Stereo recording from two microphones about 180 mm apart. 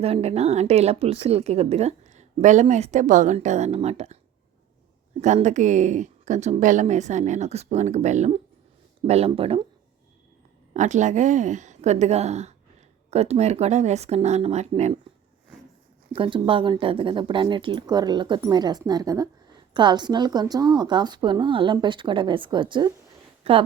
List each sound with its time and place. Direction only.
0.0 s speech: 35° right (ahead or behind)
5.2 s speech: 40° right (ahead or behind)
10.8 s speech: 40° right (ahead or behind)
16.1 s speech: 30° right (ahead or behind)